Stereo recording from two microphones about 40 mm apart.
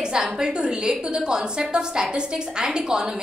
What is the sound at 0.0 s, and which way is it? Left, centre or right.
A woman's voice, centre.